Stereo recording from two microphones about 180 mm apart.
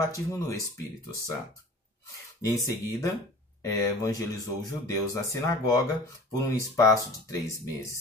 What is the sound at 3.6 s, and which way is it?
Speech, 20° left (ahead or behind).